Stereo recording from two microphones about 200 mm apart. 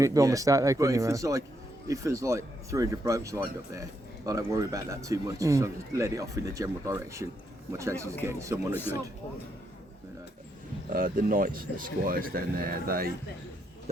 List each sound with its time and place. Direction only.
0.0 s speech: 15° right (ahead or behind)
8.7 s speech: 10° left (ahead or behind)
10.8 s speech: 45° right (ahead or behind)